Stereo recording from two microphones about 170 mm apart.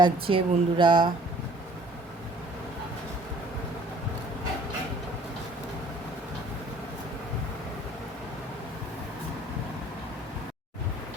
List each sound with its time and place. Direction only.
0.0 s speech: 30° right (ahead or behind)